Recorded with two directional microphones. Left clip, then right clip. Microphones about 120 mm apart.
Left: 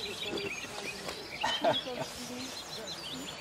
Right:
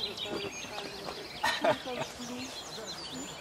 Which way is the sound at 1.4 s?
40° right (ahead or behind).